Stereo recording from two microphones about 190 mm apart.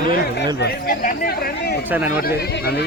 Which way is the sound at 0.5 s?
55° left (ahead or behind).